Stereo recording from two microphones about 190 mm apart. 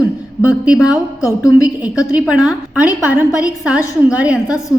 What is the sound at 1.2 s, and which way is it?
Speech, 15° left (ahead or behind).